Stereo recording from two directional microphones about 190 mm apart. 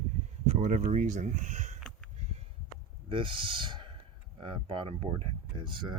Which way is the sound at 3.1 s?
25° right (ahead or behind).